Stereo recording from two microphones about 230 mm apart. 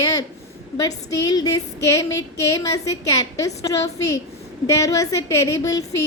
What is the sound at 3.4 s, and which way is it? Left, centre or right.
A woman's voice, centre.